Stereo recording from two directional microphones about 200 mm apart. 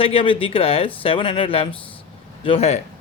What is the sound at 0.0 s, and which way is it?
Speech, 25° left (ahead or behind).